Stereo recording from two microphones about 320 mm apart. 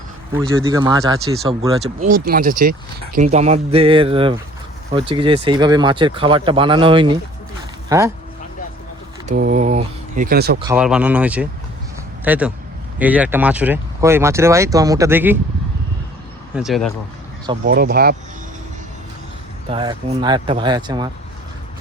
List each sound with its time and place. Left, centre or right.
0.3 s speech: centre
9.2 s speech: right
10.6 s speech: centre
16.6 s speech: centre
17.7 s speech: right
19.7 s speech: centre